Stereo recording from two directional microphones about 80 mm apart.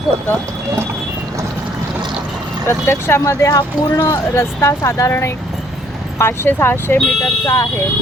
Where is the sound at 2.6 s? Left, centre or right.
Left.